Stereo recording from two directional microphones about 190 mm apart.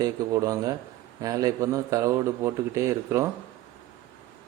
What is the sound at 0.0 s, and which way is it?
Speech, 15° right (ahead or behind).